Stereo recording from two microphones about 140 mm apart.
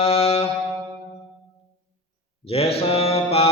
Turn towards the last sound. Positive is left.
turn(degrees=45)  # may be behind; listen again after turning